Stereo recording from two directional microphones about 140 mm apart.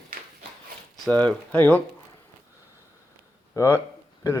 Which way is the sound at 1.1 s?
10° left (ahead or behind).